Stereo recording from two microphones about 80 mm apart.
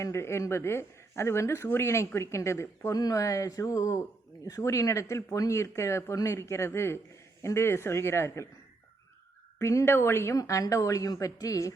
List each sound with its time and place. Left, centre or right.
0.0 s speech: left
2.9 s a woman's voice: left
9.6 s speech: left
10.3 s a woman's voice: left